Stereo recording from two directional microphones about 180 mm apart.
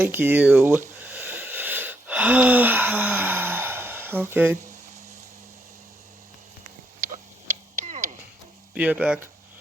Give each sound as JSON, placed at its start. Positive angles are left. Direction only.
{"t": 0.0, "sound": "speech", "side_deg": -10}
{"t": 1.0, "sound": "wheeze", "side_deg": -10}
{"t": 7.0, "sound": "a sound", "side_deg": -45}
{"t": 8.7, "sound": "speech", "side_deg": -5}